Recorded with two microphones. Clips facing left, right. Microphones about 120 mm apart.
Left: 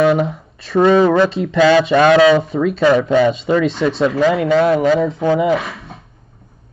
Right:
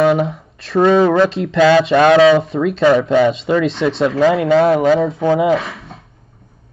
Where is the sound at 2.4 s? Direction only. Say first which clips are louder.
Right 1 dB; centre (ahead or behind).